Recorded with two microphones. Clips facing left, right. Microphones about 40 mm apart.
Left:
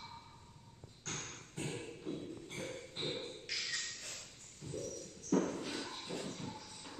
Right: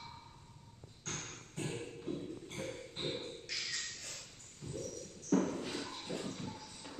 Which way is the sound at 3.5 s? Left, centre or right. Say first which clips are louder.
Left 1 dB; centre.